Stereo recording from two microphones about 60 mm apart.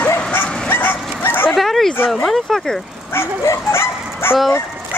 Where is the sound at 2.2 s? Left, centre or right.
Centre.